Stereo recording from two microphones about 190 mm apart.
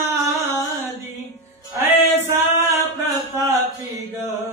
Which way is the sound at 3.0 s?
15° right (ahead or behind).